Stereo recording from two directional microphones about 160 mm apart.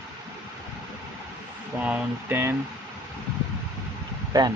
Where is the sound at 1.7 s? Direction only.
10° right (ahead or behind).